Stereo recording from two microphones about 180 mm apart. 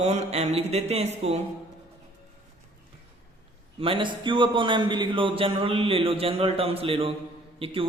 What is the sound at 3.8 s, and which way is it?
A man's voice, 30° right (ahead or behind).